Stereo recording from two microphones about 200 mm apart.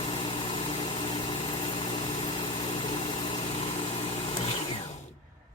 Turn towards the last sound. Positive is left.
turn(degrees=30)  # may be behind; listen again after turning